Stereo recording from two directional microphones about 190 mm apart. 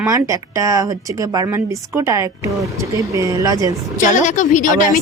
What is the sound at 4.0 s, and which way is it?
Speech, 40° left (ahead or behind).